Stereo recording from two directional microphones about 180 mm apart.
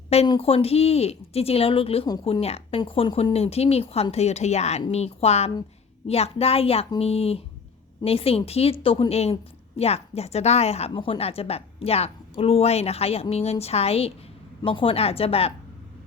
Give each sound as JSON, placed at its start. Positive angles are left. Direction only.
{"t": 0.1, "sound": "a woman's voice", "side_deg": 35}